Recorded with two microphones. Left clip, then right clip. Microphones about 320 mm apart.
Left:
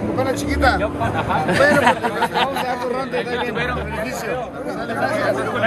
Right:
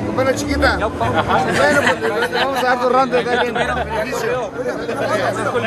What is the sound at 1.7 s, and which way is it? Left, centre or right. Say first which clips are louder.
Speech: right 1 dB; centre.